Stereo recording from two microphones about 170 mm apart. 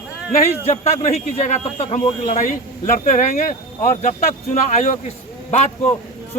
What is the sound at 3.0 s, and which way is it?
Speech, 50° left (ahead or behind).